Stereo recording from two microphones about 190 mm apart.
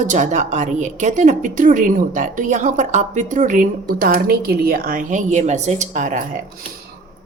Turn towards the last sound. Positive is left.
turn(degrees=-40)  # may be behind; listen again after turning